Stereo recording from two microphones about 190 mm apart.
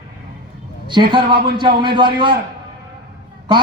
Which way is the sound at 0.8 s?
25° right (ahead or behind).